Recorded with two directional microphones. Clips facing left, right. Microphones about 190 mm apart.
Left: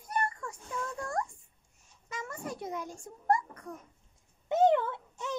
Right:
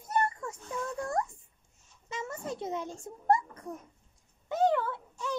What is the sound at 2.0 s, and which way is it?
A child's voice, 25° right (ahead or behind).